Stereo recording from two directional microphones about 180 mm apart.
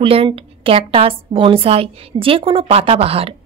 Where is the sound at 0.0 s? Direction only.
30° right (ahead or behind).